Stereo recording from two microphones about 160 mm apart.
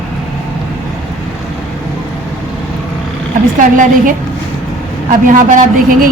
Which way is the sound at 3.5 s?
55° right (ahead or behind).